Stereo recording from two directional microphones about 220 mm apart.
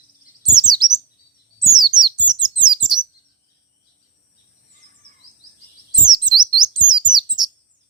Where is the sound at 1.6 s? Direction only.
20° right (ahead or behind).